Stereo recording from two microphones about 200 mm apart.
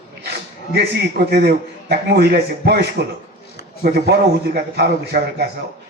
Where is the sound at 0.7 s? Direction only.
55° right (ahead or behind).